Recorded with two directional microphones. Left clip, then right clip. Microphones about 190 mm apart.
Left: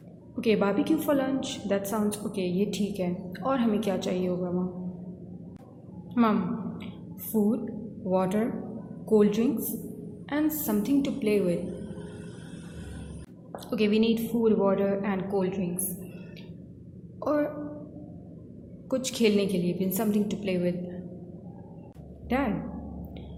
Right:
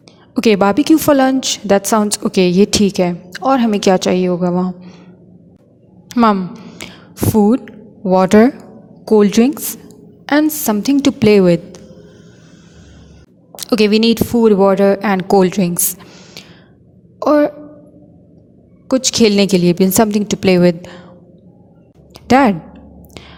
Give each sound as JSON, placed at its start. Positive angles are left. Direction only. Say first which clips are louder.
{"t": 0.3, "sound": "a woman's voice", "louder": "right 13 dB", "side_deg": -55}
{"t": 6.1, "sound": "a sound", "louder": "right 13 dB", "side_deg": -50}
{"t": 7.3, "sound": "a woman's voice", "louder": "right 14 dB", "side_deg": -45}
{"t": 13.7, "sound": "a woman's voice", "louder": "right 13 dB", "side_deg": -55}
{"t": 17.2, "sound": "a sound", "louder": "right 15 dB", "side_deg": -50}
{"t": 18.9, "sound": "a woman's voice", "louder": "right 13 dB", "side_deg": -50}
{"t": 22.3, "sound": "a woman's voice", "louder": "right 18 dB", "side_deg": -50}